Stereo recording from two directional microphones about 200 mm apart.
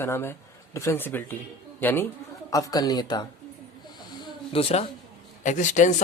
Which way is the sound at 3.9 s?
20° left (ahead or behind).